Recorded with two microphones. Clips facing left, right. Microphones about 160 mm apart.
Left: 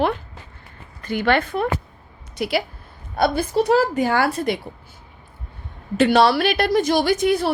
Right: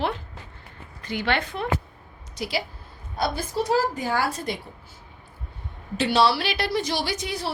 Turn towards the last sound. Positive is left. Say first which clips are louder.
# left 11 dB
turn(degrees=55)  # may be behind; listen again after turning